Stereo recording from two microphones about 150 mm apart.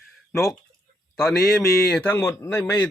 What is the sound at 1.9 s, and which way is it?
Speech, 10° left (ahead or behind).